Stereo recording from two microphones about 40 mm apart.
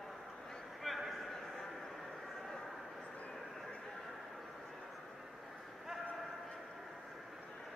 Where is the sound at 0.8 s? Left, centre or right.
Centre.